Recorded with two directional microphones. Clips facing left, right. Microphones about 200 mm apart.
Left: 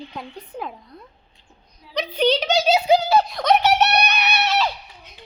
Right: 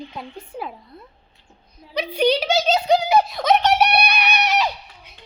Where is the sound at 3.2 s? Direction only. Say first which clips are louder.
Even; centre (ahead or behind).